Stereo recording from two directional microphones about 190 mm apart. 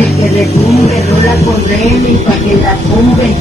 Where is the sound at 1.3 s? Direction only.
15° left (ahead or behind).